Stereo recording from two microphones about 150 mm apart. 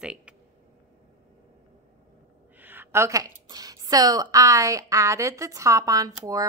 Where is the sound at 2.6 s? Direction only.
15° right (ahead or behind).